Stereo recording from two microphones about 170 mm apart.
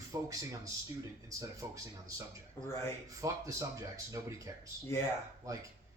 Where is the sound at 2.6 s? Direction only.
15° left (ahead or behind).